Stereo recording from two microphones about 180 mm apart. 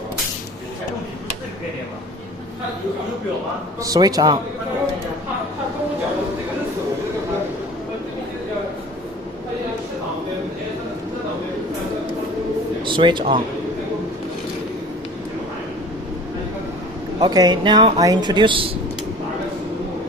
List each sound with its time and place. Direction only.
3.8 s speech: 20° right (ahead or behind)
12.8 s speech: 25° right (ahead or behind)
17.2 s speech: 25° right (ahead or behind)